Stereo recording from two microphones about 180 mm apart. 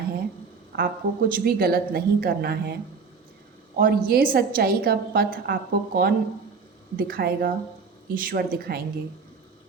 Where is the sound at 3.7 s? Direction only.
55° right (ahead or behind).